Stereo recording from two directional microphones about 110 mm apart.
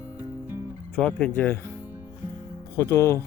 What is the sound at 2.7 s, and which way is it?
Speech, 25° left (ahead or behind).